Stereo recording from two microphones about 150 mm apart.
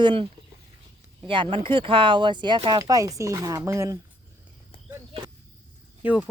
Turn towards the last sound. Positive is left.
turn(degrees=-10)  # may be behind; listen again after turning